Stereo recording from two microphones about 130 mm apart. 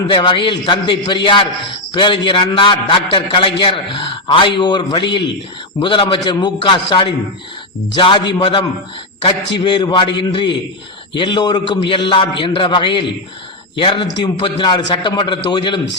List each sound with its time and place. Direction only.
0.1 s a man's voice: 35° left (ahead or behind)